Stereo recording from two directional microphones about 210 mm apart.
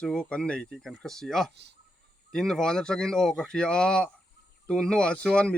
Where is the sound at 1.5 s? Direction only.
55° right (ahead or behind).